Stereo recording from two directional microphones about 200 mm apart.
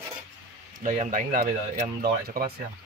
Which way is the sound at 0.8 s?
40° right (ahead or behind).